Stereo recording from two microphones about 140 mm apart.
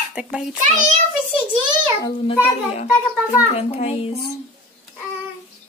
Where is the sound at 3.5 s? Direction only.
45° left (ahead or behind).